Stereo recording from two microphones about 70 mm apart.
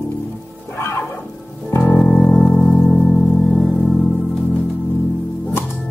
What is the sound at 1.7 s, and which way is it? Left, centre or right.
Music, left.